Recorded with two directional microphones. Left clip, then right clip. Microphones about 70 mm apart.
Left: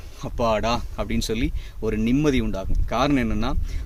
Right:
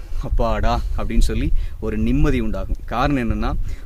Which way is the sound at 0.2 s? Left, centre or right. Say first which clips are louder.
Left 1 dB; right.